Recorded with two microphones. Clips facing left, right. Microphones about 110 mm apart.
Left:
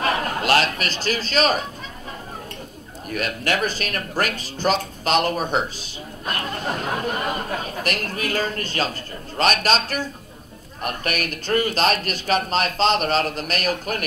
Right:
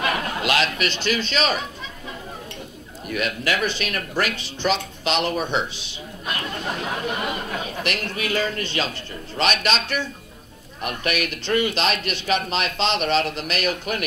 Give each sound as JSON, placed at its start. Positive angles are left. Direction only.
{"t": 0.0, "sound": "a man's voice", "side_deg": 40}
{"t": 3.1, "sound": "a man's voice", "side_deg": 40}